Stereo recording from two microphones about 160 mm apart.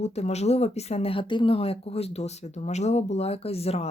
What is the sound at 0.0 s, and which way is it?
Speech, 40° left (ahead or behind).